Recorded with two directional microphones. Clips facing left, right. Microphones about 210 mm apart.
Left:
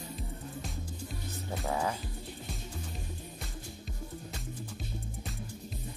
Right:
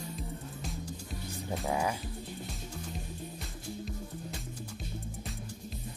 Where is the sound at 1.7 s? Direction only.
10° right (ahead or behind).